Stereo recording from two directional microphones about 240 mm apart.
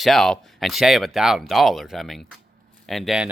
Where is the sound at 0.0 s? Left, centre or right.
Centre.